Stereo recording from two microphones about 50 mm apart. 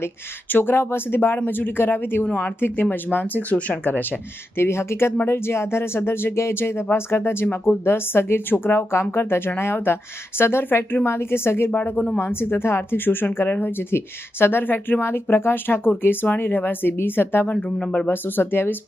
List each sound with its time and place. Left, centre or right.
0.0 s speech: left
2.2 s speech: left
4.5 s speech: left
11.7 s speech: left
12.2 s speech: left
17.5 s speech: left
18.1 s speech: left